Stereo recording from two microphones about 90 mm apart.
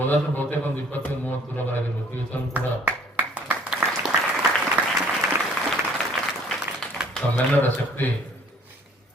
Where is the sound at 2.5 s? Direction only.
20° right (ahead or behind).